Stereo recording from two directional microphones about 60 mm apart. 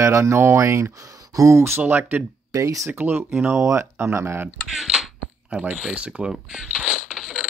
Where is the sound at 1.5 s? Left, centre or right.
Right.